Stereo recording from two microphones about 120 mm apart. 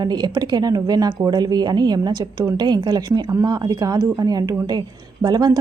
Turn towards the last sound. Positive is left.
turn(degrees=-35)  # may be behind; listen again after turning